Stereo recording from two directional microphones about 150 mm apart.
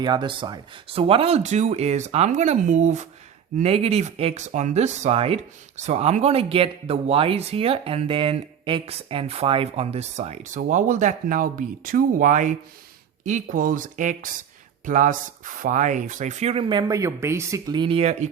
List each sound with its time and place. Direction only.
0.0 s speech: 30° right (ahead or behind)
17.7 s speech: 40° right (ahead or behind)